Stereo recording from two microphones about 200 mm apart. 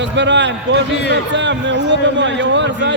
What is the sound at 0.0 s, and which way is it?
A man's voice, 60° right (ahead or behind).